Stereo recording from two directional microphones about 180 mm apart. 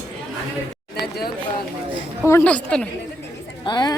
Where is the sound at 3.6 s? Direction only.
25° left (ahead or behind).